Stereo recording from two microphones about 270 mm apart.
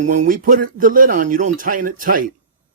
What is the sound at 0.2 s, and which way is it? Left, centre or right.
Speech, right.